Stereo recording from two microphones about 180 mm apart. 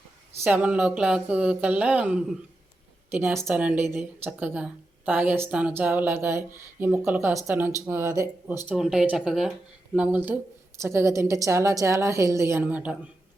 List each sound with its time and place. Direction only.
0.4 s speech: 10° right (ahead or behind)
8.7 s speech: 5° right (ahead or behind)